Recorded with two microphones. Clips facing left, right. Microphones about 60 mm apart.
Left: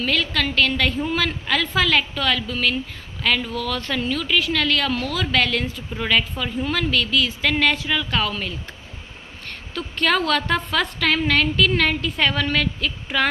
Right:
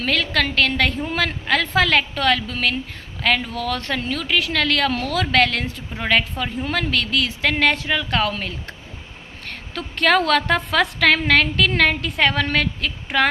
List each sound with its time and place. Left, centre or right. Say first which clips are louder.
0.0 s a woman's voice: right 1 dB; right
1.0 s a woman's voice: even; right
6.9 s a woman's voice: left 1 dB; right
9.7 s a woman's voice: right 3 dB; right
11.7 s speech: right 2 dB; right